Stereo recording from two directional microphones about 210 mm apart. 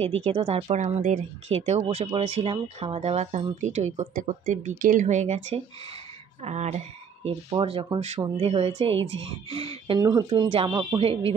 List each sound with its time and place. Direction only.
0.0 s speech: 25° right (ahead or behind)
11.0 s speech: 25° right (ahead or behind)